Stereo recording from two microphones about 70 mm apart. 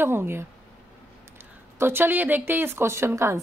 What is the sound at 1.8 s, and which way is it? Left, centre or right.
A woman's voice, right.